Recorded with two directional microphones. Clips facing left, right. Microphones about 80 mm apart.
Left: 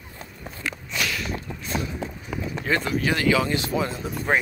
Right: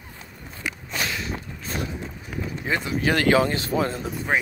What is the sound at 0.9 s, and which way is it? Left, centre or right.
Sniff, right.